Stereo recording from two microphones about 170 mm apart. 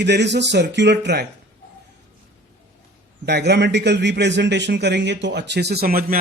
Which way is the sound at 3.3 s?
80° right.